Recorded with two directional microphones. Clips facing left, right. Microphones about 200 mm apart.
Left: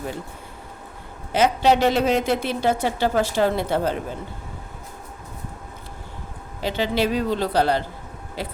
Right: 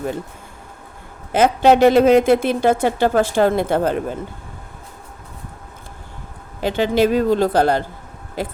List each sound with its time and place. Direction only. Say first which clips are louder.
1.3 s a woman's voice: right 5 dB; 50° right (ahead or behind)
6.6 s a woman's voice: right 6 dB; 50° right (ahead or behind)